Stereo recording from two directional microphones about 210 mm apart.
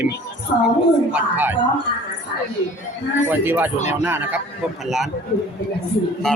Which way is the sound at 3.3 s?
10° right (ahead or behind).